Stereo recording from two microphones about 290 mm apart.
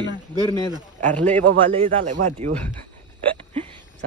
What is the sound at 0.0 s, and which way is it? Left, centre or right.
Speech, centre.